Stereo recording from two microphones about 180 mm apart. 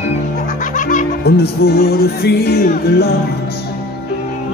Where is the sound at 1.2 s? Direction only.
65° left (ahead or behind).